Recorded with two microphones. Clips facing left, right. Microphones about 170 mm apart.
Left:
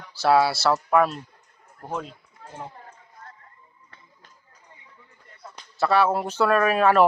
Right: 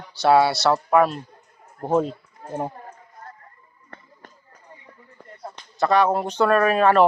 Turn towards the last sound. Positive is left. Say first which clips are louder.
# right 2 dB
turn(degrees=5)  # may be behind; listen again after turning